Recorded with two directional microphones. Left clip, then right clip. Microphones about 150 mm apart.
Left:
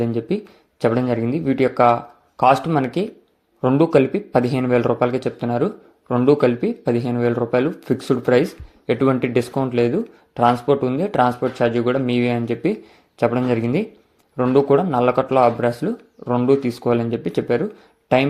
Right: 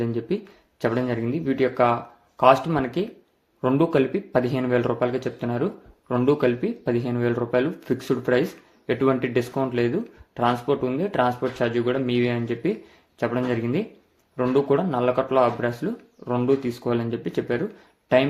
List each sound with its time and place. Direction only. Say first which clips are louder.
0.0 s speech: left 4 dB; 30° left (ahead or behind)